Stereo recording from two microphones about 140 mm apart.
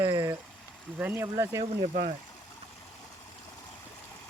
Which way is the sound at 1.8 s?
55° right (ahead or behind).